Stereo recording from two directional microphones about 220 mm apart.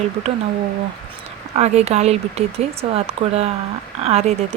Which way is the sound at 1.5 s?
30° right (ahead or behind).